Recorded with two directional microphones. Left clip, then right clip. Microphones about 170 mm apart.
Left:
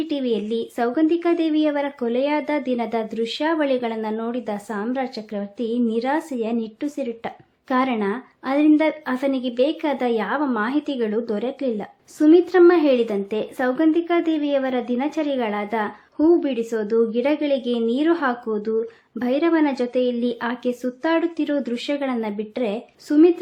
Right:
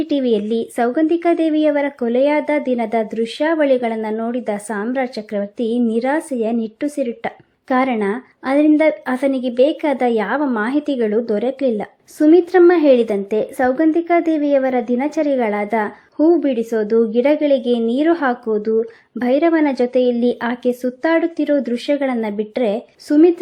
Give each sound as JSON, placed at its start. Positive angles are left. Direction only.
{"t": 0.0, "sound": "speech", "side_deg": -30}